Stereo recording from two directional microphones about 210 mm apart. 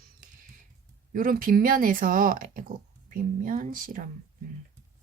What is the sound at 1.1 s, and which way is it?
Speech, 40° right (ahead or behind).